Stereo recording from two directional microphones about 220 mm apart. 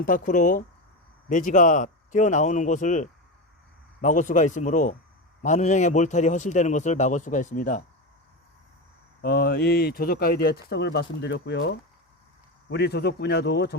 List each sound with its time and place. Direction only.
0.0 s a man's voice: 35° left (ahead or behind)
9.2 s speech: 45° left (ahead or behind)